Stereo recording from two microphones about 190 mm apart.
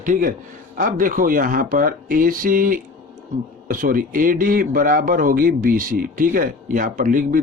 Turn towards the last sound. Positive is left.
turn(degrees=-45)  # may be behind; listen again after turning